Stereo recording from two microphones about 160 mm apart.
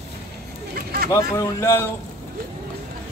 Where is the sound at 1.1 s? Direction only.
20° left (ahead or behind).